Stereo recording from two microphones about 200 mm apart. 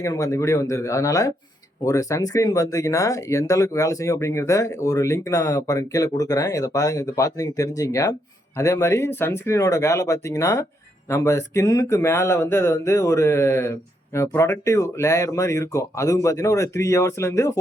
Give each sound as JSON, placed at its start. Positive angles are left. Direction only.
{"t": 0.0, "sound": "speech", "side_deg": 15}